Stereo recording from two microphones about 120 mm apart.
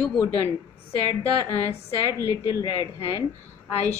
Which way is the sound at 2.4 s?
40° left (ahead or behind).